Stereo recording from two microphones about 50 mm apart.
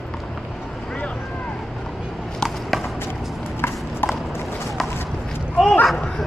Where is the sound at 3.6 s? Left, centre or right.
Left.